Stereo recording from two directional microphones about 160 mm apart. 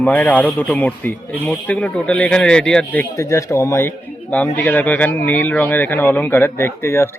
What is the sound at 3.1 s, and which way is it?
Speech, 20° left (ahead or behind).